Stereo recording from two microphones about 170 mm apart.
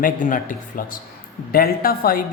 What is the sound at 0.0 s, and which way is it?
Speech, 55° left (ahead or behind).